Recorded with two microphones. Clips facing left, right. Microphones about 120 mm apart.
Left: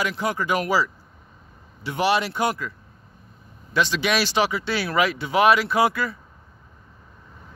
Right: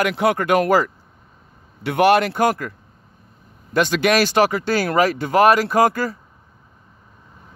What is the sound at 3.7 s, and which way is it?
Speech, 50° right (ahead or behind).